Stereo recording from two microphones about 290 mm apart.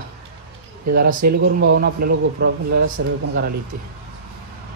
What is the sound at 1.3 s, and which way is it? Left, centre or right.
A man's voice, right.